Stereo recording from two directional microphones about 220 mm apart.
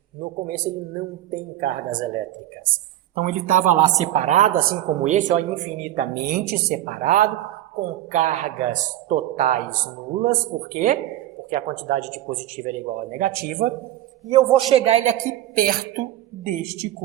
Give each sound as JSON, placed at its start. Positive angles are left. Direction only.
{"t": 0.2, "sound": "a woman's voice", "side_deg": -40}
{"t": 3.2, "sound": "a woman's voice", "side_deg": -35}
{"t": 14.3, "sound": "a man's voice", "side_deg": -25}